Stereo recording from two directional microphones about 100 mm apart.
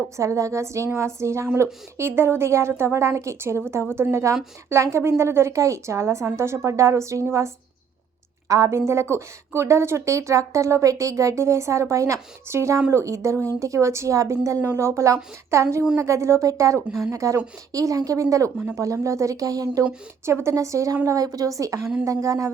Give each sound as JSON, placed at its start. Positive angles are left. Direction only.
{"t": 0.2, "sound": "a woman's voice", "side_deg": -30}